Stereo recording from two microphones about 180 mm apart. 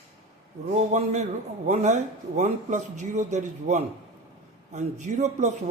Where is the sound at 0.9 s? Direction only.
40° right (ahead or behind).